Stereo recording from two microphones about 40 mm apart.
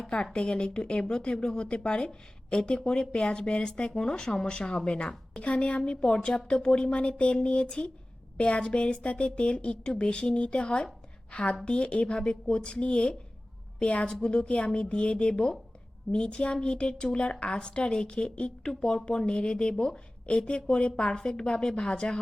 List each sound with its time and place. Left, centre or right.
0.3 s a woman's voice: left